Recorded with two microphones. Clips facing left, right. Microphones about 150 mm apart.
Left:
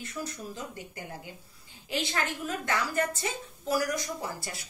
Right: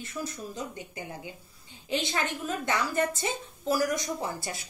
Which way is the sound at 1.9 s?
20° right (ahead or behind).